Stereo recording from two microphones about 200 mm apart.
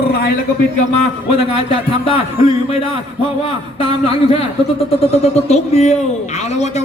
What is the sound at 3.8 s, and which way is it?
Speech, 30° left (ahead or behind).